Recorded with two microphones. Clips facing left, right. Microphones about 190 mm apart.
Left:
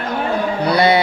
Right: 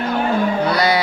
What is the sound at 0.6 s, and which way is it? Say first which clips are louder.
Music: left 3 dB; 25° left (ahead or behind).